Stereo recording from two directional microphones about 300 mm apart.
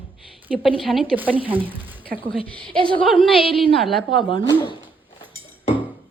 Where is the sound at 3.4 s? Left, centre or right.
Centre.